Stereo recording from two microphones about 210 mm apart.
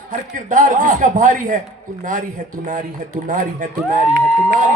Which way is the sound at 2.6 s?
35° right (ahead or behind).